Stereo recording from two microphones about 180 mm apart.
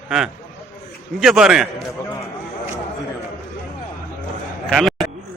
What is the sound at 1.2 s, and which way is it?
Speech, centre (ahead or behind).